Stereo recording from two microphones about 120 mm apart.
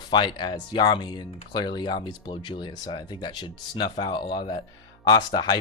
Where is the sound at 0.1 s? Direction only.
40° left (ahead or behind).